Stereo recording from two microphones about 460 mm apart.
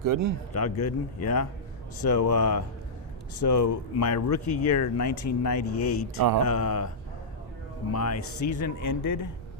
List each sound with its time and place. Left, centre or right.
0.0 s speech: right
0.5 s speech: left
6.1 s speech: right
6.6 s speech: left
7.9 s speech: left